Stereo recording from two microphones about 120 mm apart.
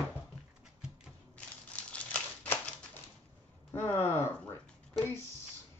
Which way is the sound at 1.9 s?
10° left (ahead or behind).